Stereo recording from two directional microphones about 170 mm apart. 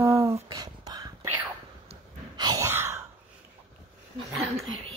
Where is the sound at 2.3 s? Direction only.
25° right (ahead or behind).